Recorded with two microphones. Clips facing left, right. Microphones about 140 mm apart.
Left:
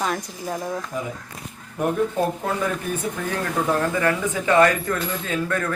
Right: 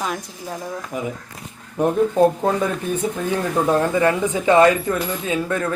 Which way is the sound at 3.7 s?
20° right (ahead or behind).